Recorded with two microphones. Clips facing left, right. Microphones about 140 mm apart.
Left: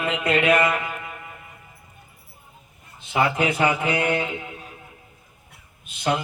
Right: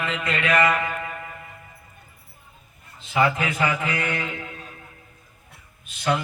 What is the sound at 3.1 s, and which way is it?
A man's voice, 25° left (ahead or behind).